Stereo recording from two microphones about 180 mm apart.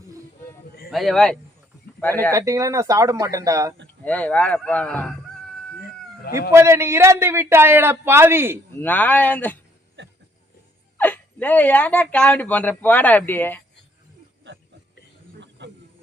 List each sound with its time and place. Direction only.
0.9 s speech: centre (ahead or behind)
2.3 s a man's voice: 15° right (ahead or behind)
4.0 s speech: 10° left (ahead or behind)
6.5 s a man's voice: 15° right (ahead or behind)
8.8 s speech: 10° left (ahead or behind)
10.0 s a sound: 90° right
10.9 s speech: 10° left (ahead or behind)
15.4 s snake: 80° right